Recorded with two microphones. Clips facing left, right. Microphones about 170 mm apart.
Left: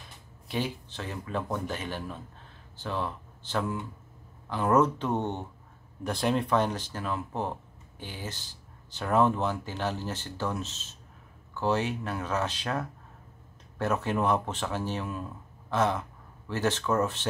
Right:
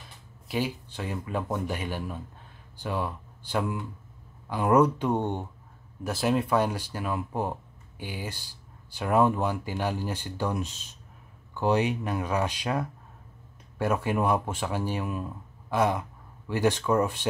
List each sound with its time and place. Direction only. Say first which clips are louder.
0.5 s speech: right 2 dB; 5° right (ahead or behind)